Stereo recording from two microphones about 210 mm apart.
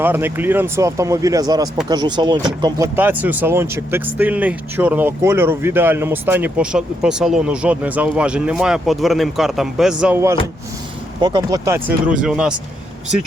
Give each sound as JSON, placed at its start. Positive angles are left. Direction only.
{"t": 0.0, "sound": "speech", "side_deg": -10}